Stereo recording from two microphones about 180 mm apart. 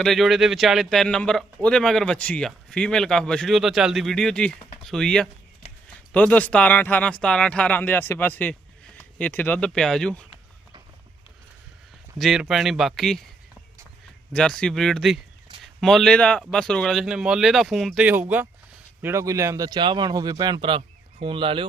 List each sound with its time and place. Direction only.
0.0 s speech: centre (ahead or behind)
12.2 s speech: centre (ahead or behind)
14.3 s speech: 5° left (ahead or behind); by 21.7 s 30° right (ahead or behind)